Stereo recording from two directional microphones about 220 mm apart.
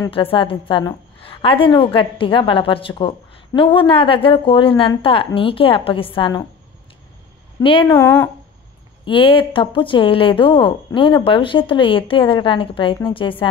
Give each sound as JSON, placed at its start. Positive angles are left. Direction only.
{"t": 0.0, "sound": "a woman's voice", "side_deg": 25}
{"t": 7.8, "sound": "speech", "side_deg": 10}
{"t": 9.0, "sound": "a woman's voice", "side_deg": 25}